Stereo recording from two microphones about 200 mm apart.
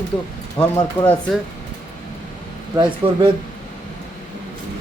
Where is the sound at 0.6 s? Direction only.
10° left (ahead or behind).